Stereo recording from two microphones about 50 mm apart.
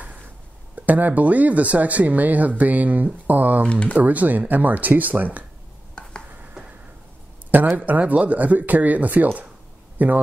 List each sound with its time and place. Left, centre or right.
0.7 s speech: right
7.7 s speech: right